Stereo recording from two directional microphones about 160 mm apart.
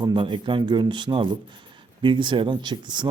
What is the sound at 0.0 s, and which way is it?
Speech, 30° right (ahead or behind).